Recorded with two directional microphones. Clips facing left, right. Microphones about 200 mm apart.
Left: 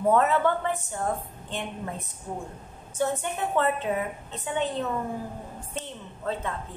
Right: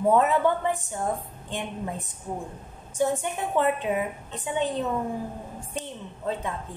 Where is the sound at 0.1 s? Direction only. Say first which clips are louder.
Right 1 dB; 15° right (ahead or behind).